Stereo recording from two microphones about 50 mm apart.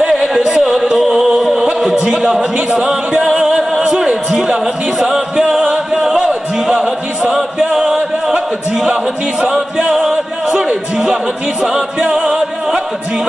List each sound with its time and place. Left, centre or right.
0.1 s a sound: centre
0.4 s music: centre
2.0 s a man's voice: centre
2.5 s a capella: right
3.3 s music: centre
9.4 s a capella: centre
11.6 s music: centre